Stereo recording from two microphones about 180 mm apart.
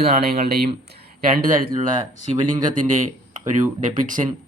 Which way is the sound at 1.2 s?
50° right (ahead or behind).